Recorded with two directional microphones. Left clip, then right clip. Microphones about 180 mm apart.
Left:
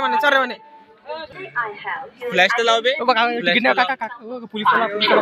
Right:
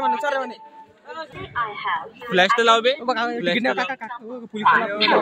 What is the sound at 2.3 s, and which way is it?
Speech, 60° right (ahead or behind).